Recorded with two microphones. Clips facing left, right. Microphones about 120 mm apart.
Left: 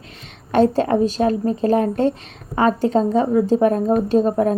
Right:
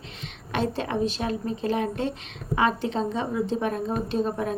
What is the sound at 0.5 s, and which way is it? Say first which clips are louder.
A woman's voice: left 11 dB; 45° left (ahead or behind).